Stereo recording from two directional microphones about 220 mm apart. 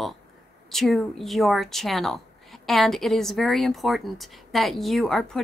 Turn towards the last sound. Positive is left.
turn(degrees=0)  # may be behind; listen again after turning